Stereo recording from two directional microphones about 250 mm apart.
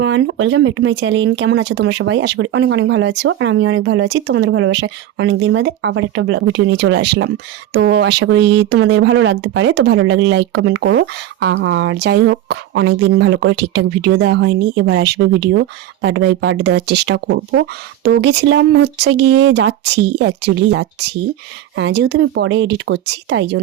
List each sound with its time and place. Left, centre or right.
0.0 s speech: right